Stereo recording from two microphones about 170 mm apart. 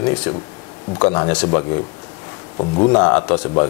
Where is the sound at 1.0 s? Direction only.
25° left (ahead or behind).